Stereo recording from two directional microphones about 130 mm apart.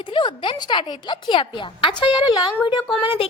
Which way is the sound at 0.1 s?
40° left (ahead or behind).